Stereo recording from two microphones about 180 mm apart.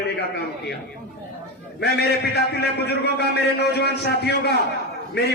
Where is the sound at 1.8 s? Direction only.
65° left (ahead or behind).